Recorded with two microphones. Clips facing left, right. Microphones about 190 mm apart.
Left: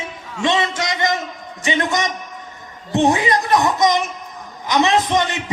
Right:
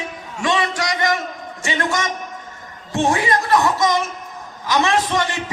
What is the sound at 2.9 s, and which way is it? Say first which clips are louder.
A man's voice: left 2 dB; 20° left (ahead or behind).